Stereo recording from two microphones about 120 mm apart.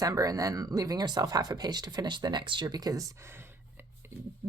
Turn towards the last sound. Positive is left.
turn(degrees=-20)  # may be behind; listen again after turning